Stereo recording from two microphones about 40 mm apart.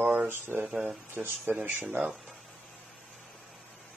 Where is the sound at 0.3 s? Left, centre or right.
Right.